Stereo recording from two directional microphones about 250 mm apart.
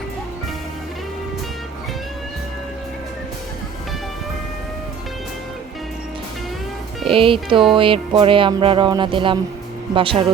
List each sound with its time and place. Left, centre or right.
7.1 s music: right